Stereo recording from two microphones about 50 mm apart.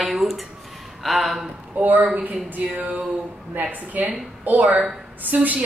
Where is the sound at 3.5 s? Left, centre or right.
Right.